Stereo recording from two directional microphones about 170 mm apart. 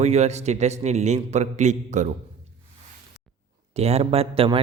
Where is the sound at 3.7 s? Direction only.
40° right (ahead or behind).